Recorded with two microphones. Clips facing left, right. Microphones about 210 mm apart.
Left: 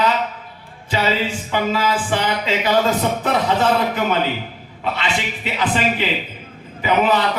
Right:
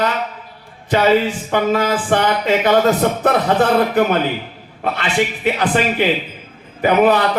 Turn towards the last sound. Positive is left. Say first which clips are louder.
# right 4 dB
turn(degrees=-50)  # may be behind; listen again after turning